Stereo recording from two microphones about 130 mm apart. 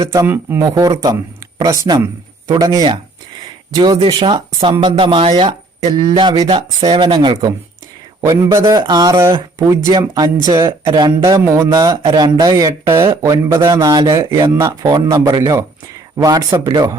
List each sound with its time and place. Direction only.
0.0 s speech: 25° right (ahead or behind)
2.5 s speech: 25° right (ahead or behind)